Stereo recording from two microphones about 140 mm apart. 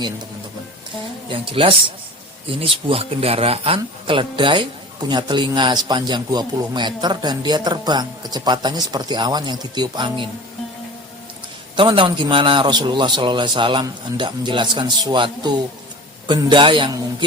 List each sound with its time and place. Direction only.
1.3 s speech: 40° right (ahead or behind)
11.8 s speech: 35° right (ahead or behind)